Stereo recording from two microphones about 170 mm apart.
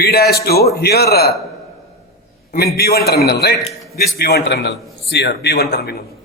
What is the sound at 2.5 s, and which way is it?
A man's voice, 65° left (ahead or behind).